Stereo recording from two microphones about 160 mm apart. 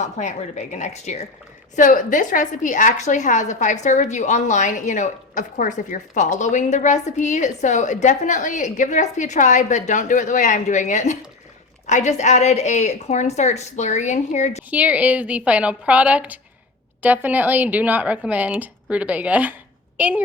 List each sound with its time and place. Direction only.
0.0 s a woman's voice: 45° left (ahead or behind)
14.7 s speech: 10° right (ahead or behind)